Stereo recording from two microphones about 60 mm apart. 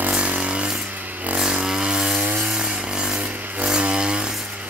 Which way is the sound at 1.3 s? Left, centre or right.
Centre.